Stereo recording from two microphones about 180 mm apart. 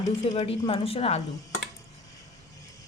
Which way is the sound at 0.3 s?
30° left (ahead or behind).